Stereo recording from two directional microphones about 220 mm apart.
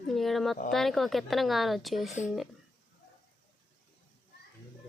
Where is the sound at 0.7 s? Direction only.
Centre (ahead or behind).